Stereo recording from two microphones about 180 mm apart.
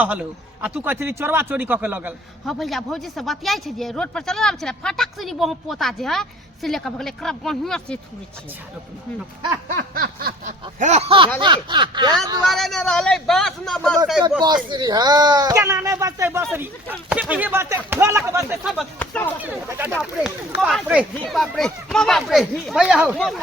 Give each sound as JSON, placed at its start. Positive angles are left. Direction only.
{"t": 0.0, "sound": "a man's voice", "side_deg": -10}
{"t": 2.5, "sound": "speech", "side_deg": 0}
{"t": 9.6, "sound": "snicker", "side_deg": -55}
{"t": 11.3, "sound": "speech", "side_deg": -25}
{"t": 12.5, "sound": "speech", "side_deg": 0}
{"t": 14.4, "sound": "a man's voice", "side_deg": -25}
{"t": 18.6, "sound": "speech", "side_deg": 0}
{"t": 19.4, "sound": "a man's voice", "side_deg": -10}